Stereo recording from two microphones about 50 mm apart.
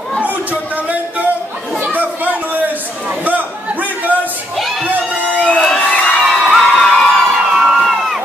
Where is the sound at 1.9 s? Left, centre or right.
Right.